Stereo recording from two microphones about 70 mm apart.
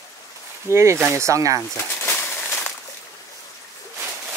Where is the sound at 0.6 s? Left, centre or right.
Right.